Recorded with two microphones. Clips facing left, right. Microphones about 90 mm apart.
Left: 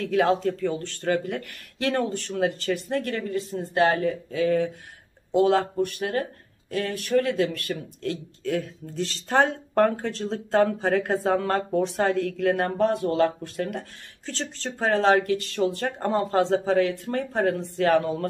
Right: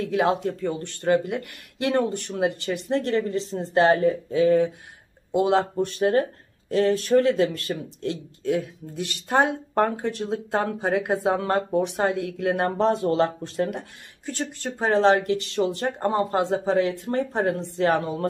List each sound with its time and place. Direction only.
0.0 s speech: 20° right (ahead or behind)